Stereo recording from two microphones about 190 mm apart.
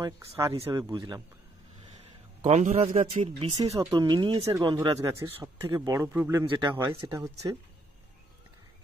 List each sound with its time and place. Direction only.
0.0 s speech: 15° right (ahead or behind)
2.4 s speech: 35° right (ahead or behind); by 7.5 s 20° right (ahead or behind)